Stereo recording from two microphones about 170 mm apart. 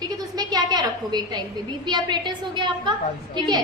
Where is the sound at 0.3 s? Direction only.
25° right (ahead or behind).